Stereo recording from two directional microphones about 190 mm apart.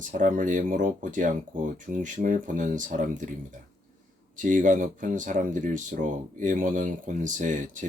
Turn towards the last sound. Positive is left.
turn(degrees=-40)  # may be behind; listen again after turning